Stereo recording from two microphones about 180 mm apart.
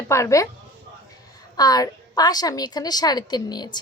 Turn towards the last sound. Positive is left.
turn(degrees=25)  # may be behind; listen again after turning